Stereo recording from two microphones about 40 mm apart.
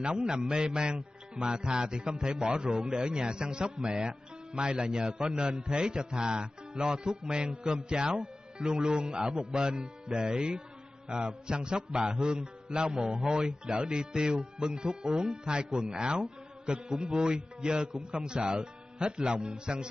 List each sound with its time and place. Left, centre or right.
0.0 s a man's voice: right
15.4 s a man's voice: right